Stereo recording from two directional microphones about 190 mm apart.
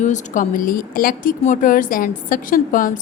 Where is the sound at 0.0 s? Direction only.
40° left (ahead or behind).